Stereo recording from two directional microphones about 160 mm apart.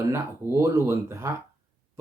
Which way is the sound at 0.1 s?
15° right (ahead or behind).